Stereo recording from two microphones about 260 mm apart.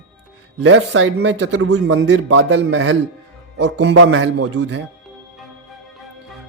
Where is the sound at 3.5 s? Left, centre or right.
Right.